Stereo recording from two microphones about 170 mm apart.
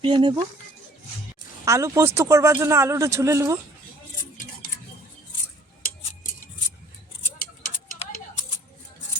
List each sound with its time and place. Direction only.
0.0 s speech: 30° right (ahead or behind)
1.6 s a man's voice: 15° right (ahead or behind)